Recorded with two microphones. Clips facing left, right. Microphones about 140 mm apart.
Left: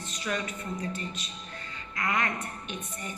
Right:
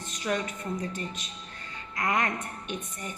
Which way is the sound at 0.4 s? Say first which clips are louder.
Right 1 dB; 45° right (ahead or behind).